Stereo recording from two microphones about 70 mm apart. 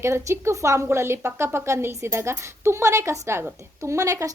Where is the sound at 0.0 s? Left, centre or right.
Right.